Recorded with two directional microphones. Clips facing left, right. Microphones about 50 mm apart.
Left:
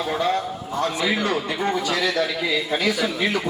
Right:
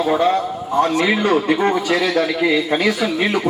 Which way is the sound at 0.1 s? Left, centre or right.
Right.